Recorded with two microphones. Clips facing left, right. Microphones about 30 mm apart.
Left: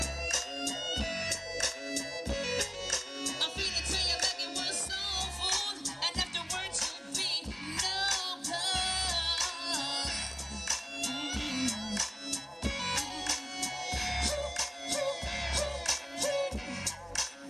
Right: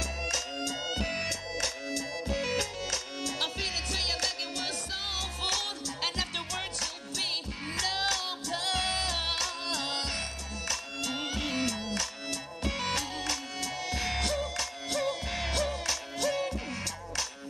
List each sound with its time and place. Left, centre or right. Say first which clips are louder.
0.2 s music: right 1 dB; right